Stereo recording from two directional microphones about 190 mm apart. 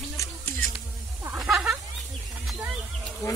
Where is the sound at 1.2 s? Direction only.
10° right (ahead or behind).